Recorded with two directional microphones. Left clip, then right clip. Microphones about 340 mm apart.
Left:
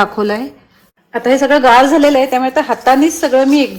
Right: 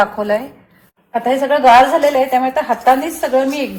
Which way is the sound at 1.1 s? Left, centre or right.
Left.